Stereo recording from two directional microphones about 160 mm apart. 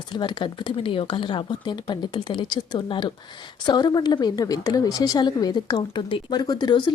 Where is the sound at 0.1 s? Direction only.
30° left (ahead or behind).